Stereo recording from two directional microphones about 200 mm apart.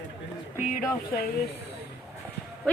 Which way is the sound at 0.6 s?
45° left (ahead or behind).